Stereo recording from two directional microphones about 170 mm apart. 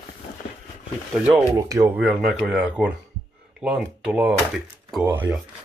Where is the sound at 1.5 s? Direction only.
15° right (ahead or behind).